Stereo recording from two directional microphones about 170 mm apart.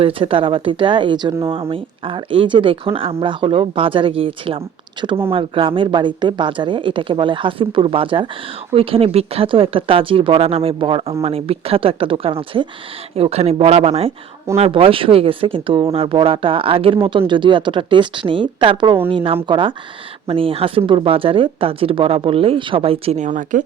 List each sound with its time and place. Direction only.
0.0 s speech: 30° right (ahead or behind); by 23.6 s 50° right (ahead or behind)